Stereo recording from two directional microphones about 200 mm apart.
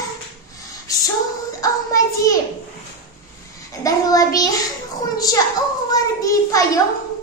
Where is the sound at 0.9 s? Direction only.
15° left (ahead or behind).